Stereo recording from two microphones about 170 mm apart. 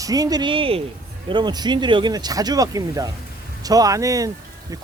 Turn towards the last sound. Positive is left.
turn(degrees=-20)  # may be behind; listen again after turning